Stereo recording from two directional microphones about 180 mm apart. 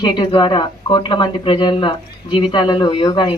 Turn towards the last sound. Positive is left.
turn(degrees=20)  # may be behind; listen again after turning